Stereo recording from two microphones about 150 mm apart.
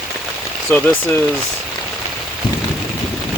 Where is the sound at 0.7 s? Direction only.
15° left (ahead or behind).